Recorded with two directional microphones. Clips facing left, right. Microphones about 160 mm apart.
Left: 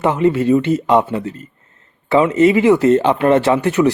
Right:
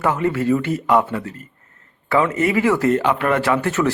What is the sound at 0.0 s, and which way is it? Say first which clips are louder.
Speech: left 5 dB; 20° left (ahead or behind).